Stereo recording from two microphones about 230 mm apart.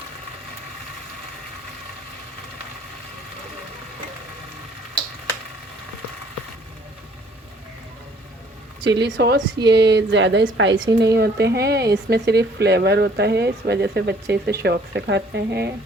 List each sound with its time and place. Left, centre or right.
8.9 s speech: right